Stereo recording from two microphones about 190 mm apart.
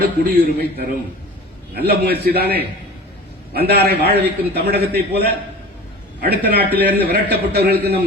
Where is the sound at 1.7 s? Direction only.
60° right (ahead or behind).